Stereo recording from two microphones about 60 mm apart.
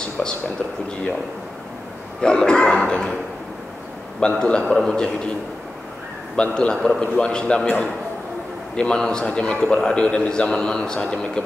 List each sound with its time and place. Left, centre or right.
0.2 s a man's voice: centre
2.2 s a man's voice: centre
4.2 s a man's voice: centre
6.3 s a man's voice: centre
8.7 s a man's voice: centre